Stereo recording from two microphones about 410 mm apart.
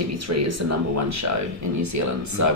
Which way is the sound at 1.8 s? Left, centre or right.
Right.